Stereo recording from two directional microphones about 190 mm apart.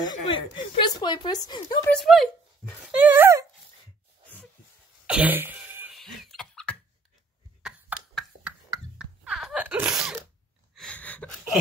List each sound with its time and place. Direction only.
0.2 s a woman's voice: 25° left (ahead or behind)
1.9 s speech: centre (ahead or behind)
2.7 s dog: 5° right (ahead or behind)
5.0 s throat clearing: 5° right (ahead or behind)
5.9 s cough: centre (ahead or behind)
7.6 s a sound: centre (ahead or behind)